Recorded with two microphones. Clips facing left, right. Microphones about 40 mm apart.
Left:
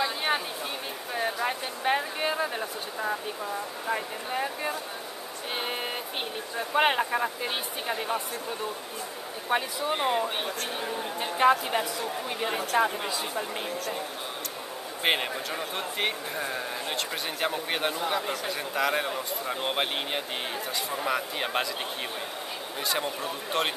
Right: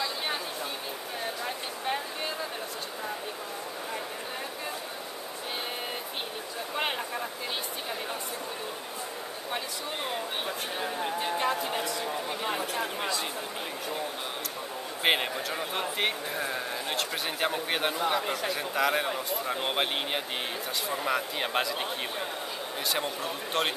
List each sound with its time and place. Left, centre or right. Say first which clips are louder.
0.0 s a sound: left 4 dB; left
3.9 s speech: left 9 dB; left
6.7 s speech: left 8 dB; left
9.5 s speech: left 8 dB; left
11.6 s speech: left 3 dB; centre
12.7 s speech: left 8 dB; left
15.0 s a man's voice: even; centre
22.8 s a man's voice: left 2 dB; centre